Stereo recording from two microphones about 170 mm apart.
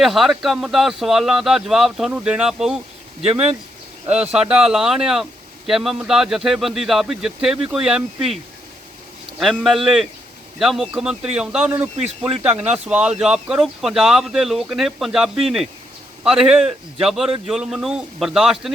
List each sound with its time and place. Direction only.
0.0 s speech: centre (ahead or behind)
3.2 s speech: 35° right (ahead or behind)
4.0 s speech: 10° right (ahead or behind)
9.4 s speech: centre (ahead or behind)